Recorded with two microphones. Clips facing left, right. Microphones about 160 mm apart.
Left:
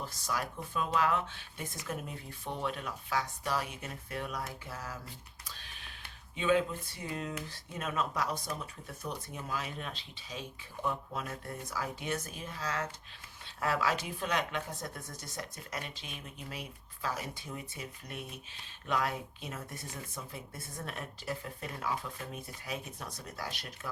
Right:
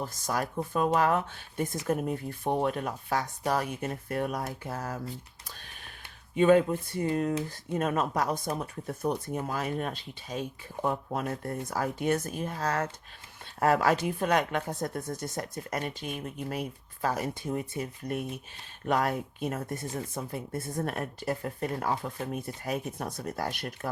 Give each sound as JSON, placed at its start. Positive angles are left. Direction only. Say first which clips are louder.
{"t": 0.0, "sound": "speech", "louder": "right 5 dB", "side_deg": -45}